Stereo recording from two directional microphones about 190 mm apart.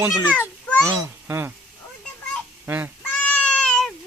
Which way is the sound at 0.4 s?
10° left (ahead or behind).